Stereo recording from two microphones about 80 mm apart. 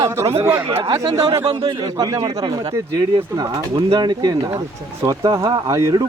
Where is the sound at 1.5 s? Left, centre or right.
Right.